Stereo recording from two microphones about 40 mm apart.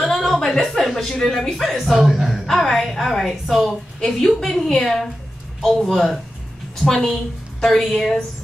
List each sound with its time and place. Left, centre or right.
0.0 s a sound: centre
0.8 s speech: centre
4.0 s a woman's voice: centre